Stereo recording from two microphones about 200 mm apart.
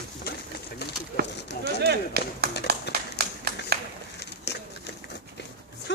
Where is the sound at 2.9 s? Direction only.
55° left (ahead or behind).